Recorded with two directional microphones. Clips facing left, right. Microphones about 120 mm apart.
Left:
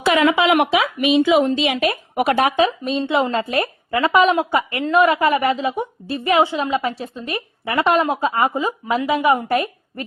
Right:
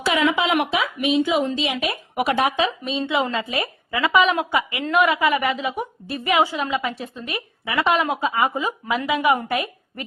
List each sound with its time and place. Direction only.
0.0 s speech: 60° left (ahead or behind)
1.9 s a woman's voice: 50° left (ahead or behind)